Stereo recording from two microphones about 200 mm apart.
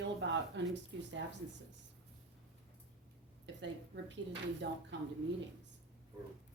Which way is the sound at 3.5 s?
65° right (ahead or behind).